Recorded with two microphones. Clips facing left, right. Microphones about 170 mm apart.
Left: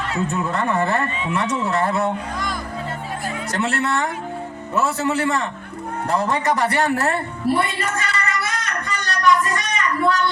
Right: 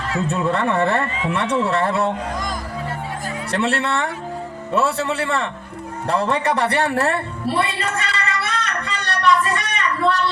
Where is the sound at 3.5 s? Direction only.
30° right (ahead or behind).